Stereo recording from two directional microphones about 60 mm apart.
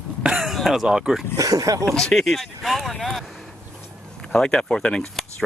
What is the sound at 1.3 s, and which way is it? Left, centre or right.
Speech, right.